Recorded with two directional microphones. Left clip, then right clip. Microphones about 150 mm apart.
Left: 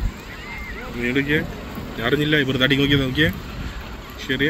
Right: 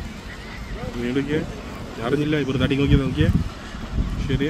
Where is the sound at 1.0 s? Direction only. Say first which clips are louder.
Left 4 dB; 10° right (ahead or behind).